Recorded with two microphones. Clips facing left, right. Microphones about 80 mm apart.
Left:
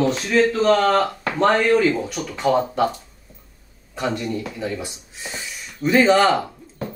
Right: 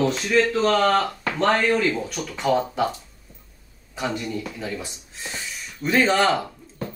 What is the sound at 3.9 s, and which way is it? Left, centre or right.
Speech, centre.